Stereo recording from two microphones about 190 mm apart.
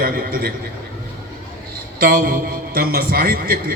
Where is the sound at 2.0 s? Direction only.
50° right (ahead or behind).